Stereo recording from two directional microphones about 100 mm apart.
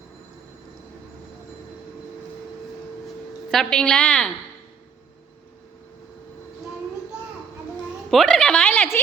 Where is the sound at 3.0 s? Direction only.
5° left (ahead or behind).